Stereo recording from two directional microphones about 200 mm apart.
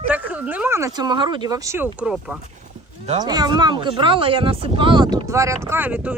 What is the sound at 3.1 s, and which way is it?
Speech, 20° right (ahead or behind).